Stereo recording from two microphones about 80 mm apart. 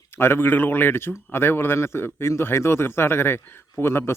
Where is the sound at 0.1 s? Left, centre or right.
Left.